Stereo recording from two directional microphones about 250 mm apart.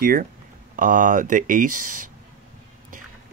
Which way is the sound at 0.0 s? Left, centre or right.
Right.